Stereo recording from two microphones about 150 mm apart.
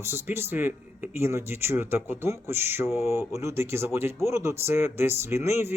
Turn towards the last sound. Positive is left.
turn(degrees=-15)  # may be behind; listen again after turning